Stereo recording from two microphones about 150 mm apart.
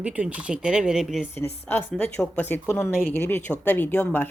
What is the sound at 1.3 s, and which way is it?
A woman's voice, 15° left (ahead or behind).